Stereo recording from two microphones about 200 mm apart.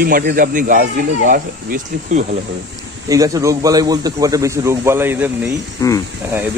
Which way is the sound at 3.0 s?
15° right (ahead or behind).